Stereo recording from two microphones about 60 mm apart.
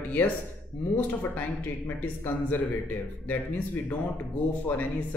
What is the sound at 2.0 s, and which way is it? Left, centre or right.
A man's voice, left.